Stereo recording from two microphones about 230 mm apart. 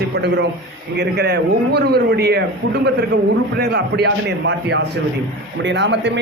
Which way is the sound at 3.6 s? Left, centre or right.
Right.